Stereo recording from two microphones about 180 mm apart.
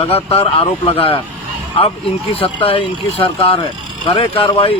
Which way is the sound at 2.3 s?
30° left (ahead or behind).